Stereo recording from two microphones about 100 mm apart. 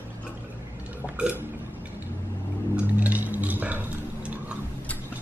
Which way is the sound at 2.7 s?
15° right (ahead or behind).